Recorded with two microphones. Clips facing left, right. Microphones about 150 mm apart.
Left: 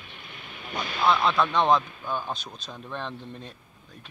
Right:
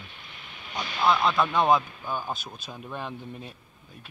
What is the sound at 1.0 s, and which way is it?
Speech, centre (ahead or behind).